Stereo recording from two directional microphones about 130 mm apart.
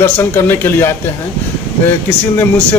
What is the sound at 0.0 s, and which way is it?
A man's voice, 20° left (ahead or behind).